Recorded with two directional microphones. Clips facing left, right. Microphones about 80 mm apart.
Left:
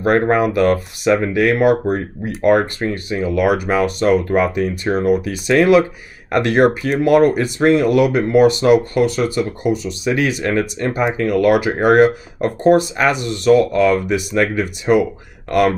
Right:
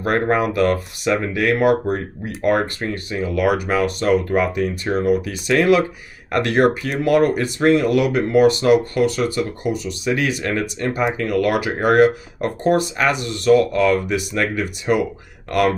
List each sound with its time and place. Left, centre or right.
0.0 s speech: left